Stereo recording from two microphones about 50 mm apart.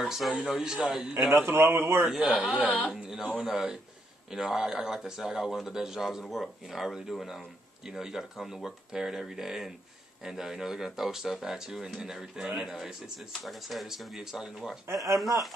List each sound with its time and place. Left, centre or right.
0.0 s speech: centre
1.3 s a man's voice: right
2.1 s speech: right
2.9 s speech: centre